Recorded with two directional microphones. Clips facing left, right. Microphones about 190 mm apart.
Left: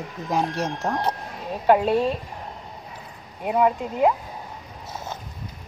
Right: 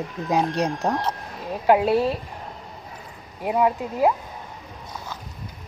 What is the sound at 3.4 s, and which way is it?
Speech, centre (ahead or behind).